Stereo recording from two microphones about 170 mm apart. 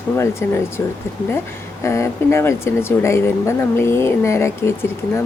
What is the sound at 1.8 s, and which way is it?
Speech, 15° left (ahead or behind).